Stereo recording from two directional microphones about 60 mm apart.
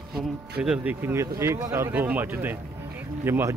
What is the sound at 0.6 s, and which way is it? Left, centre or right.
Speech, right.